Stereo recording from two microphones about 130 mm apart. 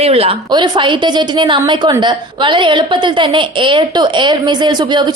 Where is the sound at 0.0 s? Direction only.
50° right (ahead or behind).